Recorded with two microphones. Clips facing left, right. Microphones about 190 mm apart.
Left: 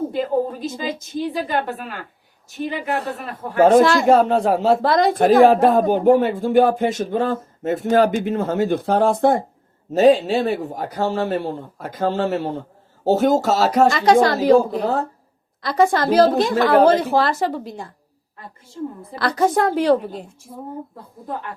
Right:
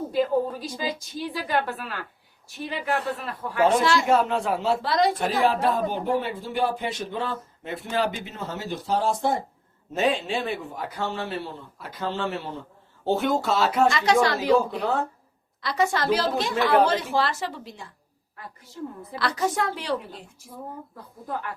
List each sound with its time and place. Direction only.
0.0 s a woman's voice: 25° left (ahead or behind)
2.9 s a man's voice: 40° left (ahead or behind)
9.9 s a man's voice: 40° left (ahead or behind)
14.4 s speech: 35° left (ahead or behind)
15.6 s a man's voice: 50° left (ahead or behind)
19.4 s a man's voice: 45° left (ahead or behind)